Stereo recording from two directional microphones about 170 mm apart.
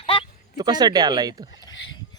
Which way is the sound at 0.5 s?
25° right (ahead or behind).